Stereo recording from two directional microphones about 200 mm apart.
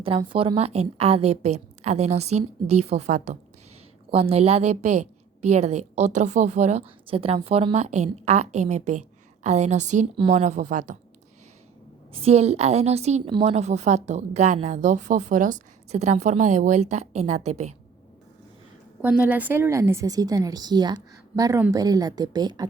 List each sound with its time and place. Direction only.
0.0 s a woman's voice: 25° right (ahead or behind)
12.1 s a woman's voice: 30° right (ahead or behind)
19.0 s a woman's voice: 5° right (ahead or behind)